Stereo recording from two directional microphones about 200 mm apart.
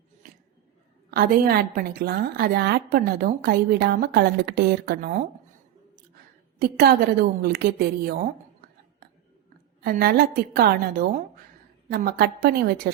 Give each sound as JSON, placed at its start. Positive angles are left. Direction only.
{"t": 1.1, "sound": "a woman's voice", "side_deg": -50}
{"t": 6.6, "sound": "a woman's voice", "side_deg": -50}
{"t": 9.8, "sound": "a woman's voice", "side_deg": -50}